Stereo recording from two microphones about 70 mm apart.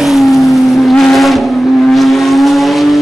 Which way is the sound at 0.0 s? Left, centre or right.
Centre.